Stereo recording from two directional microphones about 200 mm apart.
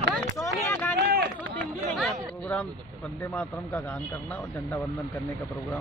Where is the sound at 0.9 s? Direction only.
50° right (ahead or behind).